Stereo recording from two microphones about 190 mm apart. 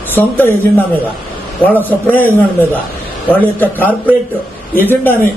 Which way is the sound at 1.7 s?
10° left (ahead or behind).